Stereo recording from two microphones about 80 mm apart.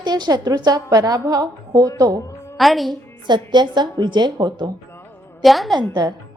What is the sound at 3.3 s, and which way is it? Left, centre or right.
A woman's voice, right.